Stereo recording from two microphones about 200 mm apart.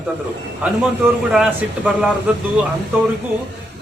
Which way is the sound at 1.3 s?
5° right (ahead or behind).